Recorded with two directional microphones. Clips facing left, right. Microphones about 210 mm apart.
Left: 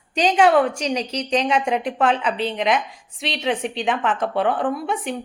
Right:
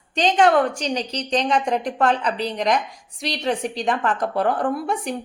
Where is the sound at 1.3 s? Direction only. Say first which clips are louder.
Even; 10° left (ahead or behind).